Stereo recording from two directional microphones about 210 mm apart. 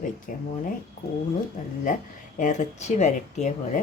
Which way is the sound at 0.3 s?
40° left (ahead or behind).